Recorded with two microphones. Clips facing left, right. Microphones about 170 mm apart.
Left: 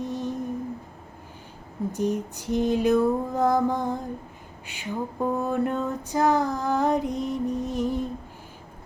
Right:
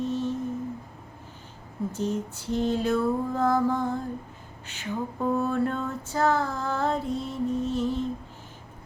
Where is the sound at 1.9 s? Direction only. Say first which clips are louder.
Left 4 dB; 15° left (ahead or behind).